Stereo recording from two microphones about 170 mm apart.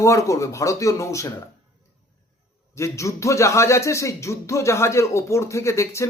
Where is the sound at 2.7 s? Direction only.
15° left (ahead or behind).